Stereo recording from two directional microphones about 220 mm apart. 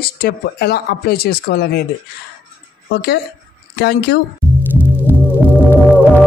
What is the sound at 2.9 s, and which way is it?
Speech, 45° left (ahead or behind).